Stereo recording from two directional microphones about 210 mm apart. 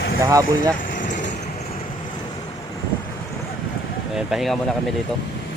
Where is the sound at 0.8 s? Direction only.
40° left (ahead or behind).